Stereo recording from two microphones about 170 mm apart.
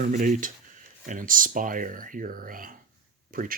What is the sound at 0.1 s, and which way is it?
Speech, 50° right (ahead or behind).